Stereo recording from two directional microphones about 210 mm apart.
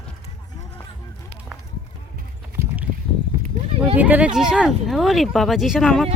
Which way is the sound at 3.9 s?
5° right (ahead or behind).